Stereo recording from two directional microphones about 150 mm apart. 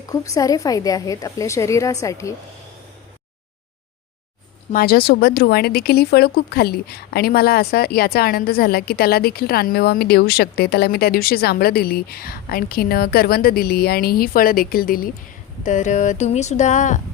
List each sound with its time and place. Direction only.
0.1 s a woman's voice: 25° left (ahead or behind)
4.7 s speech: 85° left
15.6 s speech: 55° left (ahead or behind)